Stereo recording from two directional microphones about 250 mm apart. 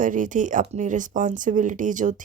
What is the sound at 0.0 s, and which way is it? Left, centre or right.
Speech, right.